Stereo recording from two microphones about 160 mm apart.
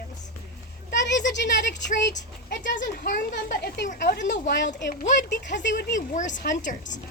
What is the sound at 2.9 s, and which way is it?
Speech, 80° left.